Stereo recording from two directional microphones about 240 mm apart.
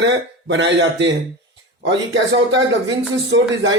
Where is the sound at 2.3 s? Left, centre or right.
Right.